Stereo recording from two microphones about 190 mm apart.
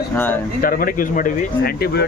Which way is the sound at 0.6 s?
50° left (ahead or behind).